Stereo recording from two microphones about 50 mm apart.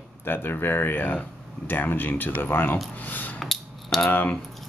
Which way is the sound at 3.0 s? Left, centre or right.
Left.